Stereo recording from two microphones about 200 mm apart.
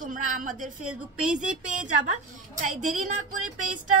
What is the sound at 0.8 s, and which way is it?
Speech, 5° right (ahead or behind).